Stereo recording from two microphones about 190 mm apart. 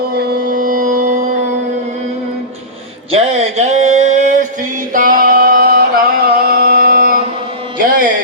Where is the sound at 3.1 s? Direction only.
35° right (ahead or behind).